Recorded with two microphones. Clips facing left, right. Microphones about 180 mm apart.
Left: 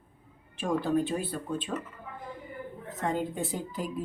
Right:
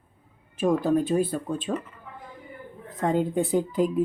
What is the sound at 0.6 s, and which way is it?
Speech, 40° right (ahead or behind).